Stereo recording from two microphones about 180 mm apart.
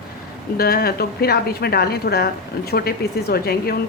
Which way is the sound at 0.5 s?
60° left (ahead or behind).